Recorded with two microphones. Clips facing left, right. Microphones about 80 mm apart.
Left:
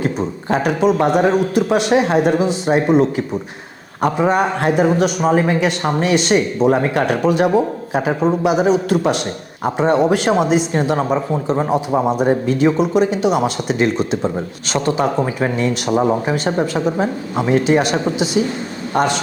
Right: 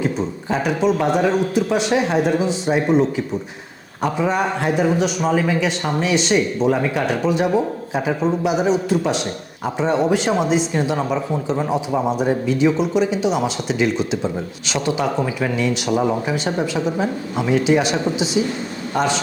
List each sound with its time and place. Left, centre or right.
0.0 s speech: left
6.9 s speech: left
10.8 s speech: left